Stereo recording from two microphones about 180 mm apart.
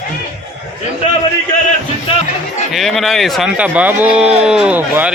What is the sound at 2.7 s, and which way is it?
Speech, centre (ahead or behind).